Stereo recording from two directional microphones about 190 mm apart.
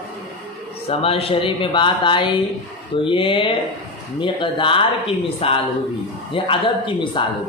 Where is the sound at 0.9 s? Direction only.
30° left (ahead or behind).